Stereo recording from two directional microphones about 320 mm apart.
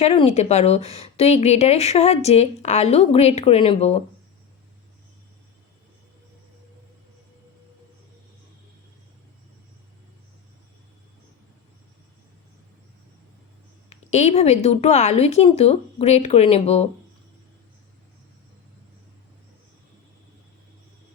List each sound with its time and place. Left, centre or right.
0.0 s a woman's voice: centre
13.9 s a woman's voice: left